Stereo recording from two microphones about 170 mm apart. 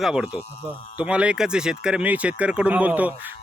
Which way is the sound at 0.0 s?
5° right (ahead or behind).